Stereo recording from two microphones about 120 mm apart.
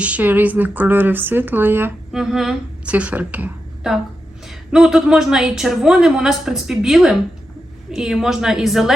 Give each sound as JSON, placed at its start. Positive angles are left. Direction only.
{"t": 0.0, "sound": "speech", "side_deg": -15}
{"t": 2.1, "sound": "speech", "side_deg": -5}
{"t": 3.9, "sound": "a woman's voice", "side_deg": 0}